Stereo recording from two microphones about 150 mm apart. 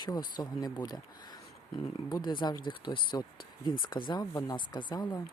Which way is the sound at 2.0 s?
30° left (ahead or behind).